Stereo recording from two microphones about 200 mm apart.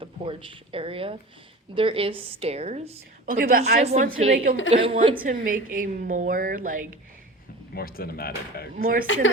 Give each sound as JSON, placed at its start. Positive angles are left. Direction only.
{"t": 0.0, "sound": "a woman's voice", "side_deg": -25}
{"t": 3.2, "sound": "a woman's voice", "side_deg": -45}
{"t": 4.7, "sound": "a woman's voice", "side_deg": -30}
{"t": 5.2, "sound": "a woman's voice", "side_deg": -45}
{"t": 7.7, "sound": "speech", "side_deg": 50}
{"t": 9.1, "sound": "a woman's voice", "side_deg": 70}